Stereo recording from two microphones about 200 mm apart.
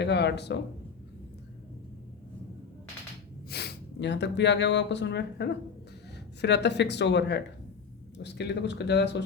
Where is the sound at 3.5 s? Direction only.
55° left (ahead or behind).